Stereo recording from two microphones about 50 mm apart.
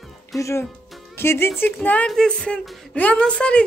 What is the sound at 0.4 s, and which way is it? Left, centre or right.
Speech, left.